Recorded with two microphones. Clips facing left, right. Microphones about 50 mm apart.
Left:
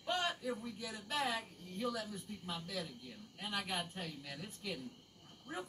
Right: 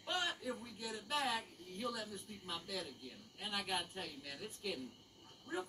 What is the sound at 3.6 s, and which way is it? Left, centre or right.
A man's voice, centre.